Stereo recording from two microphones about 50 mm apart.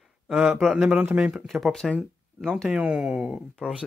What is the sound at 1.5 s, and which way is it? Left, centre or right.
Speech, centre.